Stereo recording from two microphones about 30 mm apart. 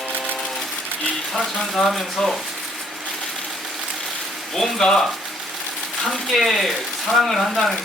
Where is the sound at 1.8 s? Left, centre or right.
Centre.